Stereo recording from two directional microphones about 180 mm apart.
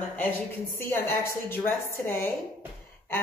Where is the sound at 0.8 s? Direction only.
15° left (ahead or behind).